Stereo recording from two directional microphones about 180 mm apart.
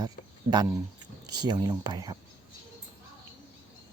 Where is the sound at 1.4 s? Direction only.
20° right (ahead or behind).